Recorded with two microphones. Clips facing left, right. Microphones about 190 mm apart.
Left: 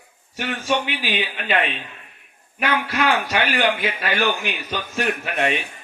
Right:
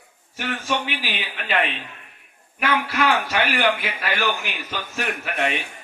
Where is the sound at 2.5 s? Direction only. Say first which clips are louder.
Even; 20° left (ahead or behind).